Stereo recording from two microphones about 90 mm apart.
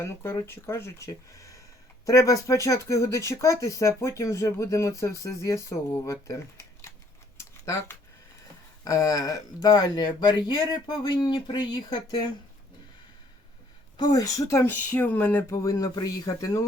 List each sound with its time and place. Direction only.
0.0 s speech: 30° left (ahead or behind)
7.3 s a sound: 35° left (ahead or behind)
8.8 s speech: 40° left (ahead or behind)
13.9 s speech: 50° left (ahead or behind); by 14.8 s 30° left (ahead or behind)
14.8 s speech: 15° left (ahead or behind)
15.6 s speech: 40° left (ahead or behind)